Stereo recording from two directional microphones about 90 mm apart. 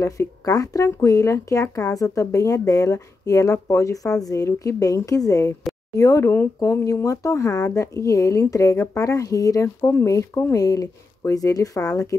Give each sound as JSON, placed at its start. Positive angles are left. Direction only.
{"t": 0.0, "sound": "speech", "side_deg": 40}